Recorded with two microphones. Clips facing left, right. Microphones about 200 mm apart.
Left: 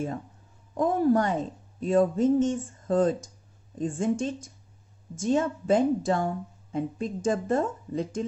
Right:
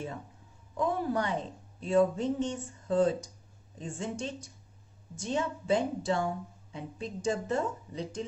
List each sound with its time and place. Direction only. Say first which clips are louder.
0.7 s a woman's voice: left 7 dB; 45° left (ahead or behind)